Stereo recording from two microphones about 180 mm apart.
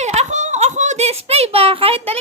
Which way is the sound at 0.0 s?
40° right (ahead or behind).